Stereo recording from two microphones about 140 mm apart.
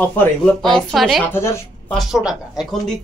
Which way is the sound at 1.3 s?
15° left (ahead or behind).